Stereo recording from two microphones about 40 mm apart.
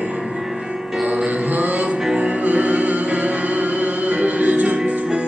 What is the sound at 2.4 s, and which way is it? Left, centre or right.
Music, right.